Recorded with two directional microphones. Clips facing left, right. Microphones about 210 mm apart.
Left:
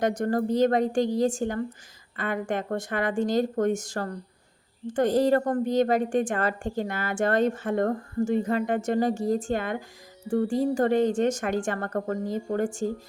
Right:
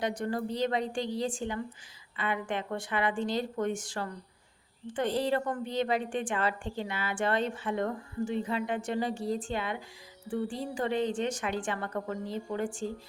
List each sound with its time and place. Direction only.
0.0 s a woman's voice: 45° left (ahead or behind)